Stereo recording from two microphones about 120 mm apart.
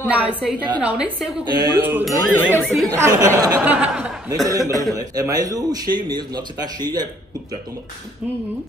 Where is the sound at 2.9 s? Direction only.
30° right (ahead or behind).